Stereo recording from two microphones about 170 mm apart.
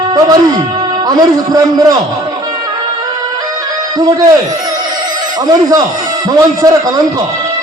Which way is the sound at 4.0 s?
20° right (ahead or behind).